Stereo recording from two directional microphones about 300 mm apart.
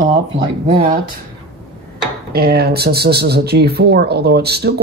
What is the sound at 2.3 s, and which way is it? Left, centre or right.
Speech, right.